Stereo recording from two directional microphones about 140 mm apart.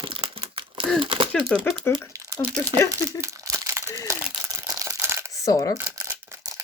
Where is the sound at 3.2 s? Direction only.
20° right (ahead or behind).